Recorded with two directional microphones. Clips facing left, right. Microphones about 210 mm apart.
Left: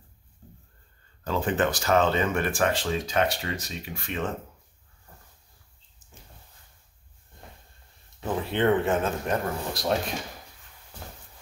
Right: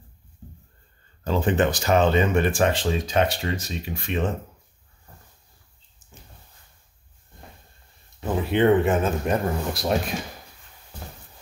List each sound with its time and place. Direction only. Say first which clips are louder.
1.2 s speech: right 4 dB; 20° right (ahead or behind)
8.2 s speech: right 5 dB; 10° right (ahead or behind)